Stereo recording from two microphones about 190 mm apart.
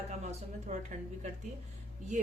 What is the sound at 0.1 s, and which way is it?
A woman's voice, 40° right (ahead or behind).